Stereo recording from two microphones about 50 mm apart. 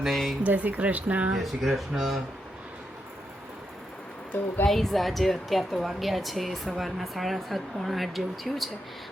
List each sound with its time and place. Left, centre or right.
0.0 s a woman's voice: centre
0.4 s speech: right
1.4 s a woman's voice: centre
4.7 s a woman's voice: centre